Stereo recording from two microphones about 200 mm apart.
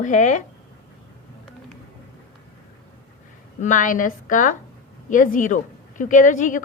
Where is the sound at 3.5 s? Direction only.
40° left (ahead or behind).